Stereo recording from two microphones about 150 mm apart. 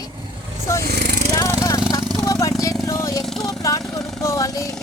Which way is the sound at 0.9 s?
90° right.